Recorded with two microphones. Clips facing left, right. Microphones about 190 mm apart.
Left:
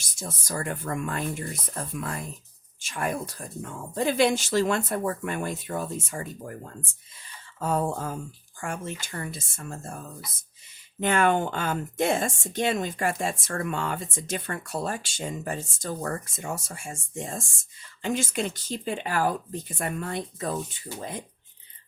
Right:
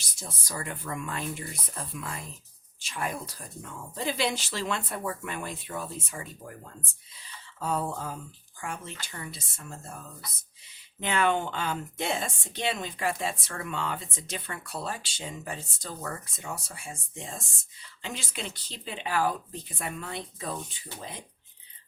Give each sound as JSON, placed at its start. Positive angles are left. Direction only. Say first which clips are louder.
{"t": 0.0, "sound": "a woman's voice", "louder": "left 6 dB", "side_deg": 45}
{"t": 7.6, "sound": "a woman's voice", "louder": "left 4 dB", "side_deg": 45}
{"t": 11.0, "sound": "a woman's voice", "louder": "left 4 dB", "side_deg": 50}